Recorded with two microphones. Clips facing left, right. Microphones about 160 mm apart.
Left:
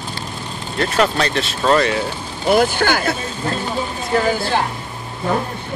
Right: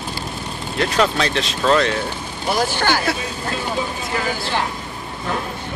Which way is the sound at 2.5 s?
55° left (ahead or behind).